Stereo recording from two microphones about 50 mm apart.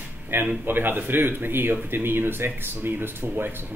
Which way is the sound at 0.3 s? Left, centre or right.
Right.